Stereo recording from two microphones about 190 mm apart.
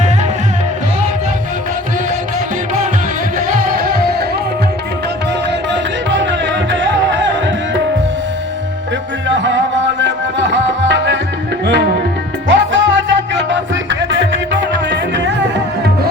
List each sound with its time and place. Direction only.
5.7 s music: 70° right (ahead or behind)
9.3 s music: 75° right (ahead or behind)
12.5 s music: 75° right (ahead or behind)